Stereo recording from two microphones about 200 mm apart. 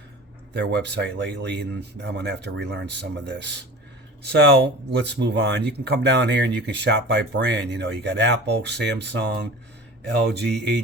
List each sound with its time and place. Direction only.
0.5 s speech: 60° right (ahead or behind)